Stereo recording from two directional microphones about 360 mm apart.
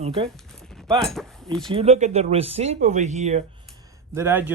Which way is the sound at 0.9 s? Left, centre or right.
Centre.